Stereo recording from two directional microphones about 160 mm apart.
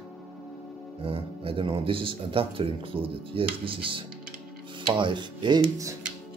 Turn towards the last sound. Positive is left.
turn(degrees=-25)  # may be behind; listen again after turning